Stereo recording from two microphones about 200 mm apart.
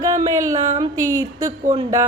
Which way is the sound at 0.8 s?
20° right (ahead or behind).